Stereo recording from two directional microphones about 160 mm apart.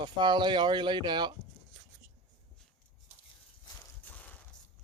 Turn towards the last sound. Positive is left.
turn(degrees=10)  # may be behind; listen again after turning